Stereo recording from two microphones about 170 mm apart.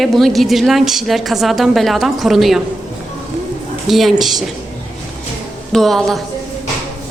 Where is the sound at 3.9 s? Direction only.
Centre (ahead or behind).